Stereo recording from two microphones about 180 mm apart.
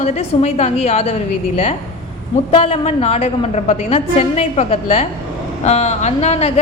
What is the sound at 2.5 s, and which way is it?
A woman's voice, 35° left (ahead or behind).